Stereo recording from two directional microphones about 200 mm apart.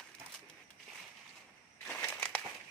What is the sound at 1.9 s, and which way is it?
Crushing, 10° left (ahead or behind).